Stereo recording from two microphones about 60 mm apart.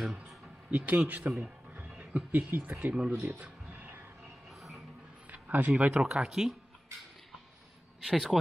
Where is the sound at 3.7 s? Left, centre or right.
Right.